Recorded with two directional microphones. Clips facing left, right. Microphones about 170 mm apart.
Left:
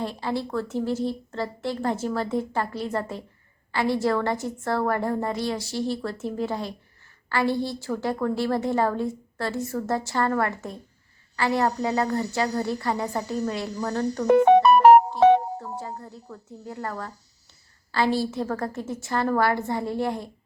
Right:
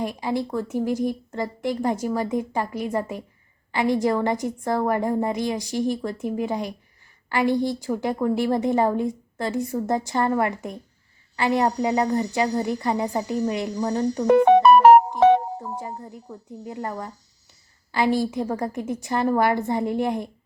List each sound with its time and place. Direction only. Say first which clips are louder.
0.0 s a woman's voice: right 3 dB; 15° right (ahead or behind)
15.8 s a woman's voice: right 2 dB; 15° right (ahead or behind)